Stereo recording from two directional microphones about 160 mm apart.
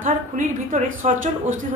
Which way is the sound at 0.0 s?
50° right (ahead or behind).